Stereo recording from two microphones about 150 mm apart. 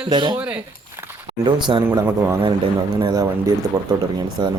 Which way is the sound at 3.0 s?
30° right (ahead or behind).